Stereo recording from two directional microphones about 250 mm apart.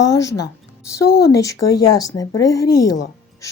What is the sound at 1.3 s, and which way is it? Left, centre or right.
A woman's voice, centre.